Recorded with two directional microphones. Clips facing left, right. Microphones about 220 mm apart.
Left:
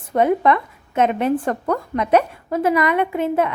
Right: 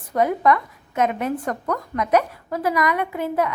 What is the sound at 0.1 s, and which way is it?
Speech, 25° left (ahead or behind).